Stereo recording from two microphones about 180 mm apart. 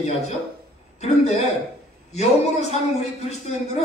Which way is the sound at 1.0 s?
35° left (ahead or behind).